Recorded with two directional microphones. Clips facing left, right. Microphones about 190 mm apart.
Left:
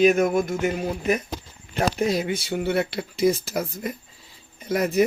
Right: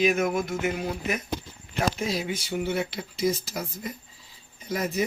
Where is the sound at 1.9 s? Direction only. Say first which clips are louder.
Left 6 dB; 60° left (ahead or behind).